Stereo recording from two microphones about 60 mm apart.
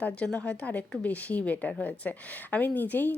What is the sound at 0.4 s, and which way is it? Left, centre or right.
A woman's voice, left.